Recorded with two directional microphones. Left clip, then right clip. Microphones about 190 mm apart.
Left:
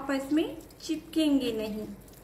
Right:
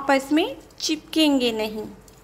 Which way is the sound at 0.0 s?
50° right (ahead or behind).